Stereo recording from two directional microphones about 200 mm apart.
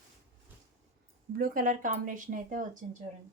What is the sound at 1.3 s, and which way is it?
A woman's voice, 45° right (ahead or behind).